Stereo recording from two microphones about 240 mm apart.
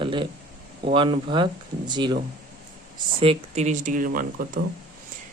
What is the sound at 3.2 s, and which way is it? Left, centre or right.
Speech, right.